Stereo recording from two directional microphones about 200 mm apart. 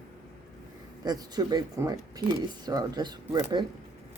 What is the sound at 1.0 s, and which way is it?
Speech, 20° right (ahead or behind).